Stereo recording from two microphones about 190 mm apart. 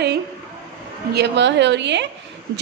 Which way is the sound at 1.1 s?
65° right (ahead or behind).